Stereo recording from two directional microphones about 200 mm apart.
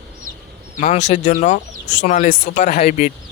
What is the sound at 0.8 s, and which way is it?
Speech, 35° left (ahead or behind).